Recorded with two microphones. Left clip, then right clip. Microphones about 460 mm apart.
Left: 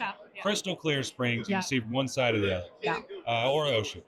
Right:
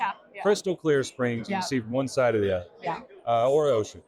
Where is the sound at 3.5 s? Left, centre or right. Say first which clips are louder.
Right 5 dB; centre.